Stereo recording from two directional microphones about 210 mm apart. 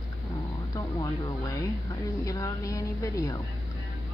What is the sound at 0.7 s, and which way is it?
Speech, 20° left (ahead or behind).